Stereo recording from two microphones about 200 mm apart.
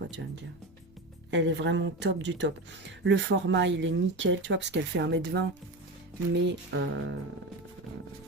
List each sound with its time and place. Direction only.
1.3 s speech: 65° right (ahead or behind)